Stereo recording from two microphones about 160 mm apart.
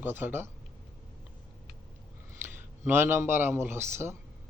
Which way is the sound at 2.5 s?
15° right (ahead or behind).